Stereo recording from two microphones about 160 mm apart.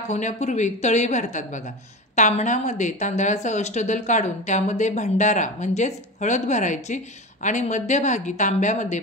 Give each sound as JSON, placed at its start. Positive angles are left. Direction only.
{"t": 0.1, "sound": "a woman's voice", "side_deg": 50}